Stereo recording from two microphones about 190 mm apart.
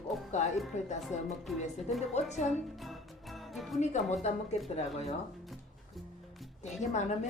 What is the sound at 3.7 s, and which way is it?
Speech, 40° left (ahead or behind).